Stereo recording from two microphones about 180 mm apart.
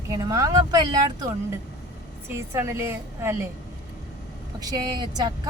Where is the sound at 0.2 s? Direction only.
20° right (ahead or behind).